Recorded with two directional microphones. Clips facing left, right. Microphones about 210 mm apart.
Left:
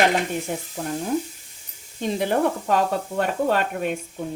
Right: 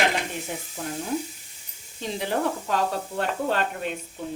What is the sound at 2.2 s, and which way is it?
Speech, 60° left (ahead or behind).